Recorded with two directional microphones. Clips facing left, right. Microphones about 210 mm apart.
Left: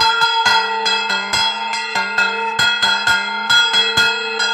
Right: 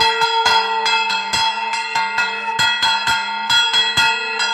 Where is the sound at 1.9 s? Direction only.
45° left (ahead or behind).